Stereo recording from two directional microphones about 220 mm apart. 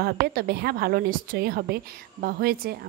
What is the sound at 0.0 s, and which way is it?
Speech, 45° right (ahead or behind).